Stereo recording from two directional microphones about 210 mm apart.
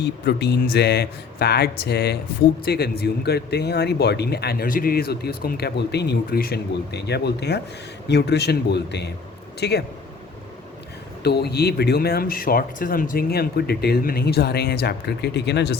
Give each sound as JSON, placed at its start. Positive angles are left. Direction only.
{"t": 0.0, "sound": "speech", "side_deg": 50}
{"t": 11.2, "sound": "speech", "side_deg": 50}